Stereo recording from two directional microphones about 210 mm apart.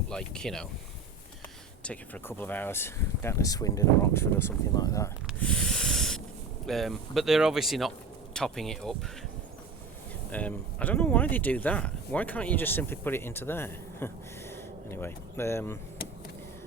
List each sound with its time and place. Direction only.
0.1 s speech: 5° left (ahead or behind)
1.8 s speech: 5° left (ahead or behind)
5.4 s snake: 5° left (ahead or behind)
6.7 s speech: centre (ahead or behind)
10.3 s speech: 5° left (ahead or behind)